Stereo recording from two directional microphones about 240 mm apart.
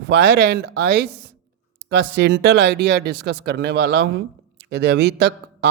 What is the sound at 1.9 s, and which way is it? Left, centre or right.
A man's voice, right.